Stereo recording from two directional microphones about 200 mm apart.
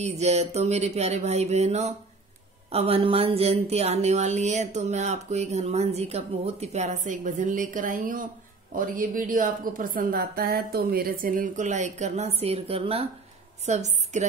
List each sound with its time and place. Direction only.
0.0 s a woman's voice: 35° right (ahead or behind)